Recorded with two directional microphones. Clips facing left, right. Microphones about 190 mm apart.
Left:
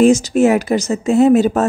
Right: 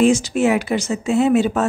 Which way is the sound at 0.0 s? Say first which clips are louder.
Left 4 dB; 40° left (ahead or behind).